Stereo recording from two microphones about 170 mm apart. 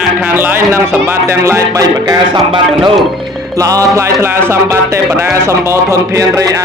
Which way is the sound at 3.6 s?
20° right (ahead or behind).